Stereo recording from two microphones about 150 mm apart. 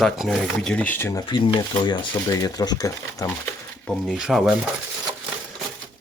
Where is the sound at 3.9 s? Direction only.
Centre (ahead or behind).